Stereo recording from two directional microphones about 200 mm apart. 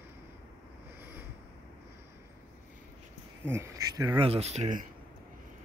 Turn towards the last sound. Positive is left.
turn(degrees=-35)  # may be behind; listen again after turning